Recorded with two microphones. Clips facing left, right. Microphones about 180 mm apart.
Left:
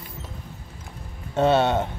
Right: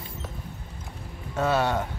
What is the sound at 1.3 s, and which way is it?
Speech, 25° left (ahead or behind).